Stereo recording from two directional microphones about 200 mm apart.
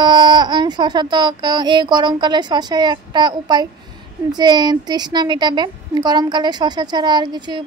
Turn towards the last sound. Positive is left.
turn(degrees=-20)  # may be behind; listen again after turning